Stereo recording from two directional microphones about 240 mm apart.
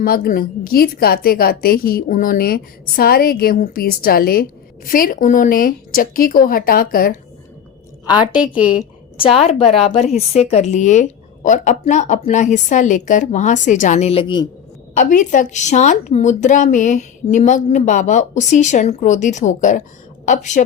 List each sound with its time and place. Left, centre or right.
0.0 s speech: left
8.0 s a woman's voice: centre
14.9 s speech: left